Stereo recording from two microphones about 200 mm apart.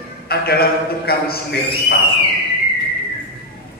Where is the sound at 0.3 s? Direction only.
50° left (ahead or behind).